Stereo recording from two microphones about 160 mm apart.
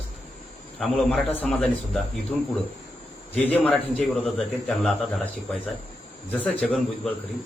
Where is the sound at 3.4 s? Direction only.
10° left (ahead or behind).